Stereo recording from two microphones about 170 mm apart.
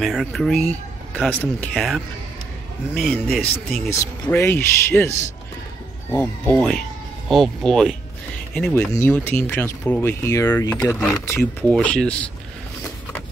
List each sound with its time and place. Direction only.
0.0 s speech: centre (ahead or behind)
3.9 s speech: 15° left (ahead or behind)
6.1 s speech: 10° left (ahead or behind)
11.7 s speech: 5° left (ahead or behind)